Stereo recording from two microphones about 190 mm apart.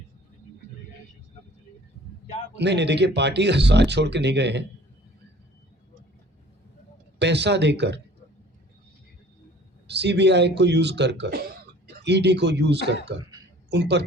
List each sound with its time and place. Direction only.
2.6 s speech: 65° right (ahead or behind)
7.2 s speech: 65° right (ahead or behind)
9.8 s speech: 65° right (ahead or behind)